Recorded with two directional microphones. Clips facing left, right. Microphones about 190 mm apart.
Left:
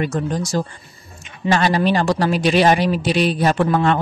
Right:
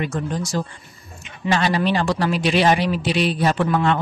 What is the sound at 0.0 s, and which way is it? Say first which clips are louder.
A man's voice: left 3 dB; 40° left (ahead or behind).